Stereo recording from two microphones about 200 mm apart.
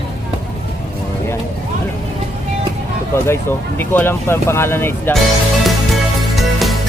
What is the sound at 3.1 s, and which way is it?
Speech, 10° left (ahead or behind).